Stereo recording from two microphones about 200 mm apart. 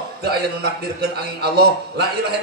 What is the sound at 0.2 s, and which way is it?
Speech, 55° right (ahead or behind).